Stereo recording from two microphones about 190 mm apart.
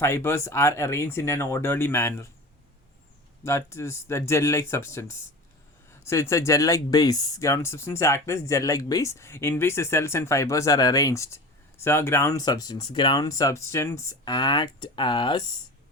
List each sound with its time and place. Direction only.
0.0 s speech: 15° left (ahead or behind)
3.4 s speech: 15° left (ahead or behind)